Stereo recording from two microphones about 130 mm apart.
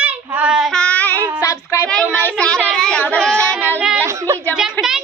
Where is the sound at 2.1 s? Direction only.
10° left (ahead or behind).